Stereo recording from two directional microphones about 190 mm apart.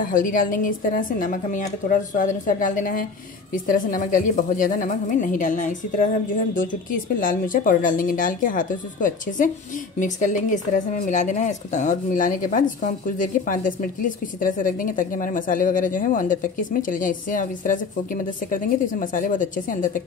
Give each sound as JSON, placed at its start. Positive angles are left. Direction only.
{"t": 0.1, "sound": "a woman's voice", "side_deg": 45}